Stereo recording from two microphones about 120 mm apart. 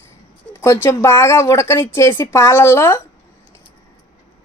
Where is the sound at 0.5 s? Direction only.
20° left (ahead or behind).